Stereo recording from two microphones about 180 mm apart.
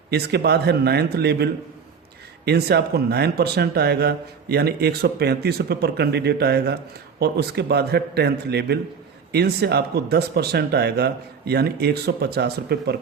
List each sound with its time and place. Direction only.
0.1 s speech: 65° right (ahead or behind)